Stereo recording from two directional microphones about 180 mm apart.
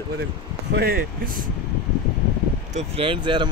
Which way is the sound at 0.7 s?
60° right (ahead or behind).